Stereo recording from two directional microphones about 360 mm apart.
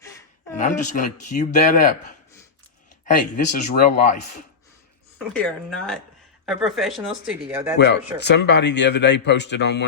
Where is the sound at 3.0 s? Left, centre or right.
Left.